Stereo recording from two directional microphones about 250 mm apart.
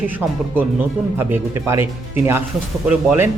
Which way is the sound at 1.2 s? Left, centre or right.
Centre.